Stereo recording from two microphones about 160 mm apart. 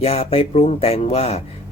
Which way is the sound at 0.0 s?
40° left (ahead or behind).